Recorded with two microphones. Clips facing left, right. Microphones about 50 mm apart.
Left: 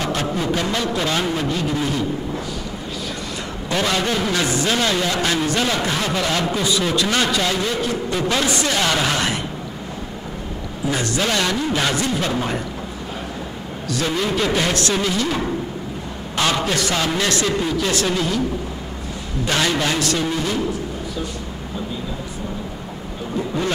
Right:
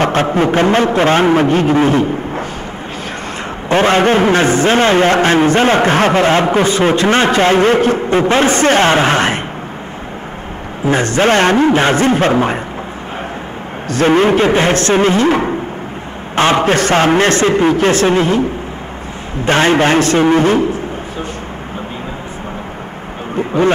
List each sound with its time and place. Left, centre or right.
0.0 s a man's voice: right
3.6 s a man's voice: right
10.9 s a man's voice: right
13.8 s a man's voice: right
19.4 s a man's voice: right
23.3 s a sound: right